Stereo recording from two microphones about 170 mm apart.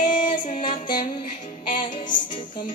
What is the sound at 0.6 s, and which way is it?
Music, 30° left (ahead or behind).